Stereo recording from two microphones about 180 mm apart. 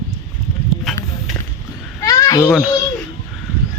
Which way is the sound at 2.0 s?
20° left (ahead or behind).